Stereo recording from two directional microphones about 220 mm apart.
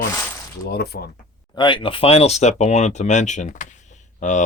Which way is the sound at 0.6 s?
45° left (ahead or behind).